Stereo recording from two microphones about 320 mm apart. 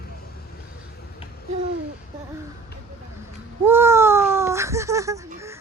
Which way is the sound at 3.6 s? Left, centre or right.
Centre.